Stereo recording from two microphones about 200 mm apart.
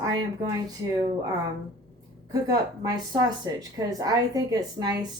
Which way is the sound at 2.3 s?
20° right (ahead or behind).